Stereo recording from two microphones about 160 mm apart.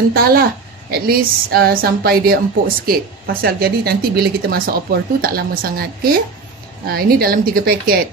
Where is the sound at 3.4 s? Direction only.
75° right (ahead or behind).